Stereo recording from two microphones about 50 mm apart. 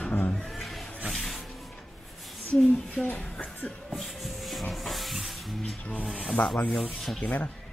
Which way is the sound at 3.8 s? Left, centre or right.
Centre.